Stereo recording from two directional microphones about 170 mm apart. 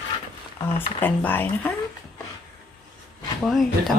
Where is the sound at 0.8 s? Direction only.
10° left (ahead or behind).